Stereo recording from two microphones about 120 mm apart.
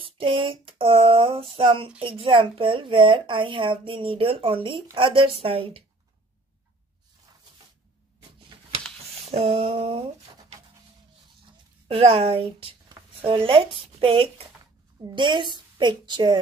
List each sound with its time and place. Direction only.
0.0 s speech: 45° right (ahead or behind)
9.2 s a sound: 55° right (ahead or behind)
11.9 s a woman's voice: 55° right (ahead or behind); by 16.3 s 40° right (ahead or behind)